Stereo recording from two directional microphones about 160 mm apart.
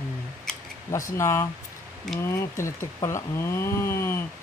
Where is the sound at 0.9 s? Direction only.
20° left (ahead or behind).